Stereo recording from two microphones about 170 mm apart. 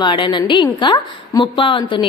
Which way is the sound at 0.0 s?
25° left (ahead or behind).